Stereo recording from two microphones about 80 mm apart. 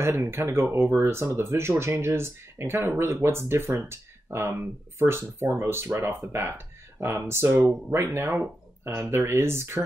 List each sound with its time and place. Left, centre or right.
0.0 s speech: right